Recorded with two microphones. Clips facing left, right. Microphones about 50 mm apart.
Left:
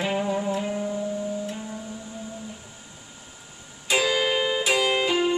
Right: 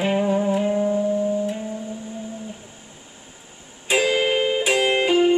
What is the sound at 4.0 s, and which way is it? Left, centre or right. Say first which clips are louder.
Music: right 4 dB; right.